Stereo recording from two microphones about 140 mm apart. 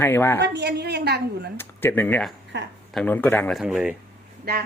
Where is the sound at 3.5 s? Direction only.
Centre (ahead or behind).